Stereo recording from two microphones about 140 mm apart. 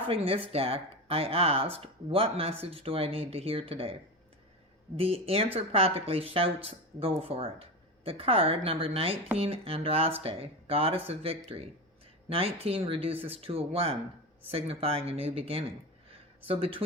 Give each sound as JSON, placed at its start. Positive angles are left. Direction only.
{"t": 0.1, "sound": "speech", "side_deg": -40}
{"t": 4.9, "sound": "speech", "side_deg": -45}
{"t": 16.0, "sound": "a sound", "side_deg": -40}